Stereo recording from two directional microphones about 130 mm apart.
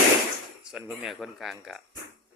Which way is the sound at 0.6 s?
Centre (ahead or behind).